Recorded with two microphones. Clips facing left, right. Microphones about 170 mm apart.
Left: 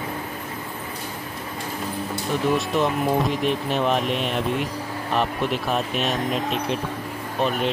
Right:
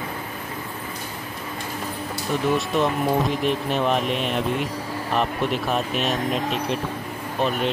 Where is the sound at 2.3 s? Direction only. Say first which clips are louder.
Even; centre (ahead or behind).